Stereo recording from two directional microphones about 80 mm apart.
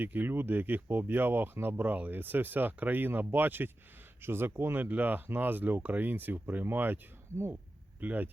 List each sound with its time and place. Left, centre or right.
0.0 s speech: right